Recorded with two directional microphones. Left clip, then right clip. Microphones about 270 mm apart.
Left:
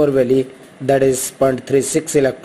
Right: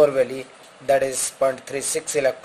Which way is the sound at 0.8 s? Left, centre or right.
Centre.